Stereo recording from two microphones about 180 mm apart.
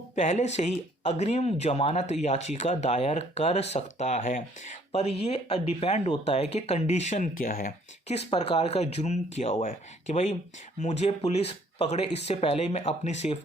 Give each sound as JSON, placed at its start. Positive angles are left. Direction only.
{"t": 0.2, "sound": "speech", "side_deg": 40}
{"t": 8.1, "sound": "speech", "side_deg": 35}